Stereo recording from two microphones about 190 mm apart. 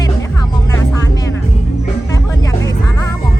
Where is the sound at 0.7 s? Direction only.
15° left (ahead or behind).